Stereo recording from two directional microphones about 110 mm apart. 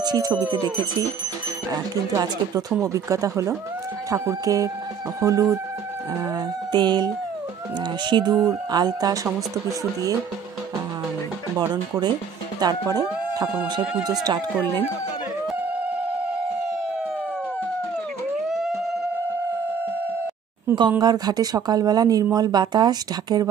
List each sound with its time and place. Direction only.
0.0 s speech: 35° right (ahead or behind)
8.1 s speech: 40° right (ahead or behind)
12.5 s speech: 35° right (ahead or behind)
21.0 s speech: 35° right (ahead or behind)